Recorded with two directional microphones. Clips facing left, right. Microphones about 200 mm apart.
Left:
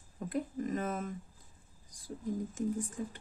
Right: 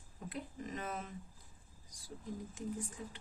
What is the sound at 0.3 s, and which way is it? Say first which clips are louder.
Speech: left 9 dB; 50° left (ahead or behind).